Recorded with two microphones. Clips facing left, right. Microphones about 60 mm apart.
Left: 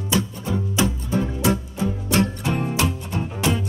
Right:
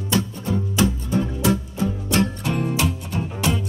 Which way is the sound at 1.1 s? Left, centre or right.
Left.